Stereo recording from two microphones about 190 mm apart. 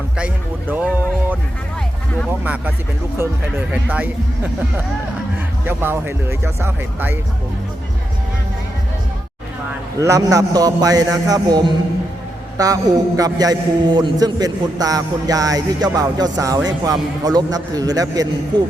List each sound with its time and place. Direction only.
0.7 s music: 10° right (ahead or behind)
2.4 s speech: 10° right (ahead or behind)
5.6 s speech: 10° right (ahead or behind)
10.0 s a man's voice: 15° right (ahead or behind)